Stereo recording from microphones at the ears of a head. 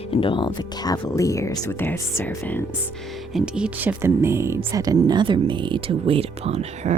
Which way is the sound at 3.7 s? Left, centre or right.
Right.